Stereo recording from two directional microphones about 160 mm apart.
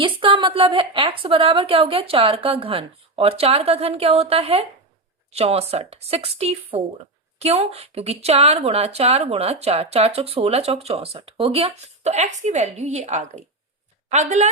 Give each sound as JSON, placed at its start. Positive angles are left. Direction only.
{"t": 0.0, "sound": "a woman's voice", "side_deg": -30}